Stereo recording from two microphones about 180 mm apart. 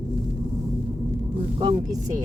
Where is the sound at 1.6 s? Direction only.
25° right (ahead or behind).